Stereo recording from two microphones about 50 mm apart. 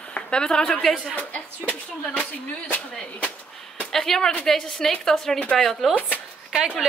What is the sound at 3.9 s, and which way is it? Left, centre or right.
A woman's voice, centre.